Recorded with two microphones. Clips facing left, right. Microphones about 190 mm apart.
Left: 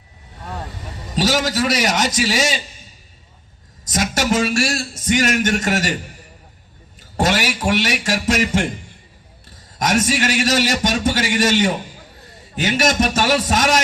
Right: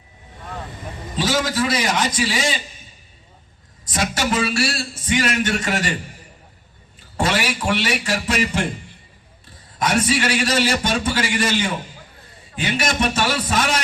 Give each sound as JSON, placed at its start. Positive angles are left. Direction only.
{"t": 1.8, "sound": "a man's voice", "side_deg": 45}
{"t": 3.8, "sound": "a man's voice", "side_deg": 45}
{"t": 7.2, "sound": "a man's voice", "side_deg": 40}
{"t": 9.7, "sound": "a man's voice", "side_deg": 45}